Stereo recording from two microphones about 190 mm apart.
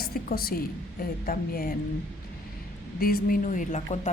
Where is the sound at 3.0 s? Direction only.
50° left (ahead or behind).